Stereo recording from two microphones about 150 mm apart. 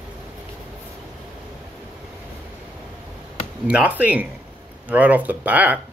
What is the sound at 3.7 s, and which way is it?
Speech, 10° right (ahead or behind).